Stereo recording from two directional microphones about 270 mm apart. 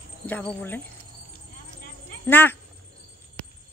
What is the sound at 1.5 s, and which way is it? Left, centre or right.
Clip-clop, left.